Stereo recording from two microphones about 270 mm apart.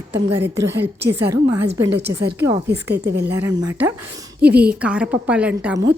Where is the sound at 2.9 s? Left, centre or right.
Right.